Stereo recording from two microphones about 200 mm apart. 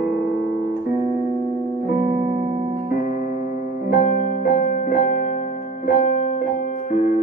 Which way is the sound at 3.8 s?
45° left (ahead or behind).